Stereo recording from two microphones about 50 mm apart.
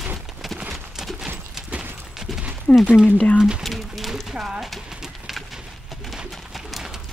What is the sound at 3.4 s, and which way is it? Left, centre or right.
Speech, centre.